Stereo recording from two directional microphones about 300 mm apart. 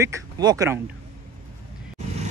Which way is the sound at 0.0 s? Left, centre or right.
Centre.